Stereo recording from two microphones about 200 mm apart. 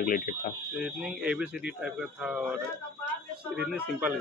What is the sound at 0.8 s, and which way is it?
Speech, centre (ahead or behind).